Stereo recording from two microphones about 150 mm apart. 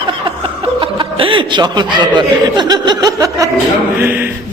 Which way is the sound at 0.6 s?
35° right (ahead or behind).